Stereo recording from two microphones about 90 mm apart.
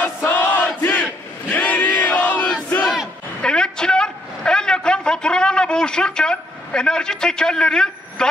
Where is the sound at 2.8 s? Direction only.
Centre (ahead or behind).